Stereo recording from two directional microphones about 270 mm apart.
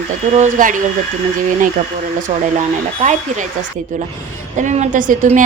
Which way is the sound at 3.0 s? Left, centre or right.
Right.